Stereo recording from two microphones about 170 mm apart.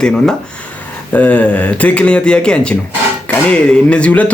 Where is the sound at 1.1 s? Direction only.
10° left (ahead or behind).